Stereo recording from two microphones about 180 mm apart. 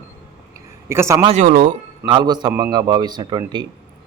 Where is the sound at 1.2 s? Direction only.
40° right (ahead or behind).